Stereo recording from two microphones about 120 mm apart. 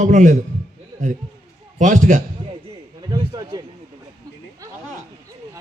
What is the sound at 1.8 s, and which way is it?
Speech, 90° right.